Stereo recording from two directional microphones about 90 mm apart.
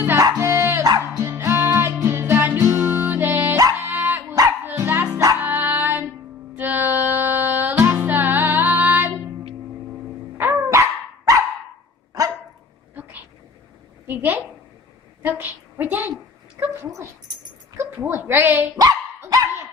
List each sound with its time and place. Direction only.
0.2 s music: 40° right (ahead or behind)
2.6 s music: 35° right (ahead or behind)
2.9 s music: 20° right (ahead or behind)
4.2 s dog: 35° right (ahead or behind)
4.7 s music: 25° right (ahead or behind)
10.3 s dog: 25° right (ahead or behind)
10.7 s dog: 35° right (ahead or behind)
14.0 s a sound: 20° right (ahead or behind)
17.7 s bow-wow: 25° right (ahead or behind)
18.8 s dog: 45° right (ahead or behind)